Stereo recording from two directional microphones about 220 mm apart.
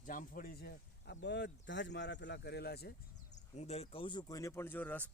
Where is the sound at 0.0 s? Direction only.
35° left (ahead or behind).